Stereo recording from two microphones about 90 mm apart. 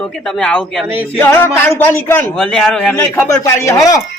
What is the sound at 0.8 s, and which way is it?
Male singing, 20° right (ahead or behind).